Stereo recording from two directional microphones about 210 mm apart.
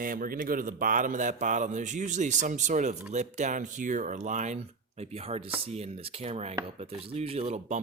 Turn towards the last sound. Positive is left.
turn(degrees=-30)  # may be behind; listen again after turning